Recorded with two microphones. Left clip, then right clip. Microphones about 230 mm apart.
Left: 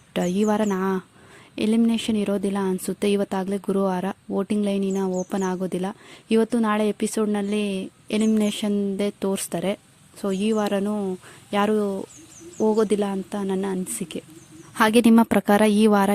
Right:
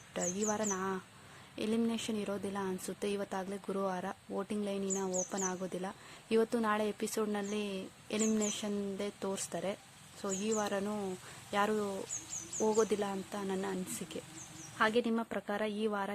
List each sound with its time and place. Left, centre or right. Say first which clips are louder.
0.1 s speech: left 13 dB; left
14.8 s a woman's voice: left 14 dB; left